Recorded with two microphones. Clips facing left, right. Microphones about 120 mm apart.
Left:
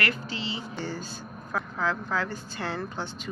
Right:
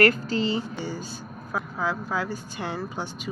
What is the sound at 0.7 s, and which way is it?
A woman's voice, 10° right (ahead or behind).